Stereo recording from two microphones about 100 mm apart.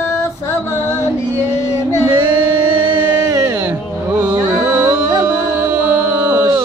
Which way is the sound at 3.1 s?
30° right (ahead or behind).